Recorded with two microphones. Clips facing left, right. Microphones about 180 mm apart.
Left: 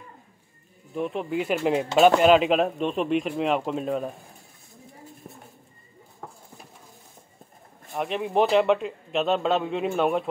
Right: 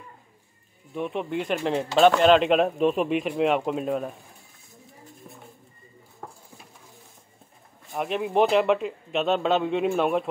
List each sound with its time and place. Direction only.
0.9 s speech: centre (ahead or behind)
7.9 s speech: centre (ahead or behind)